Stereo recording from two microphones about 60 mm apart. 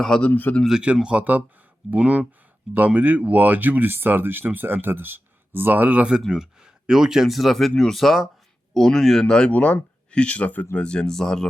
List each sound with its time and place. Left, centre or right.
0.3 s a man's voice: left
0.7 s speech: centre
9.5 s speech: left; by 11.4 s centre